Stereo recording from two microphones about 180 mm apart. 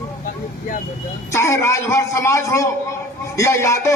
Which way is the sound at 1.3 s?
15° left (ahead or behind).